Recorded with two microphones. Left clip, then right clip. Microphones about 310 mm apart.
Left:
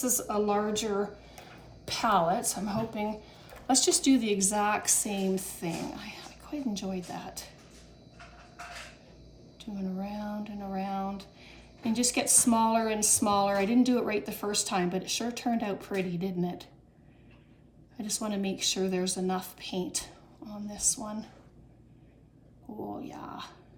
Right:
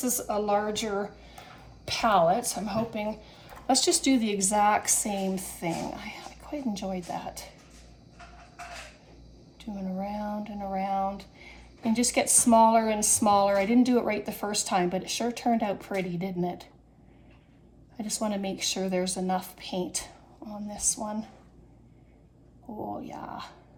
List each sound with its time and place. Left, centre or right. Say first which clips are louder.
0.0 s speech: right 1 dB; right
9.6 s speech: right 3 dB; centre
17.9 s speech: right 3 dB; centre
22.9 s speech: right 4 dB; centre